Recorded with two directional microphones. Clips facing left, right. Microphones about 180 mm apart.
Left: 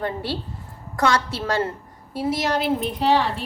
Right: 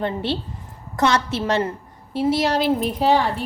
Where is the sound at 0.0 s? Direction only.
25° right (ahead or behind).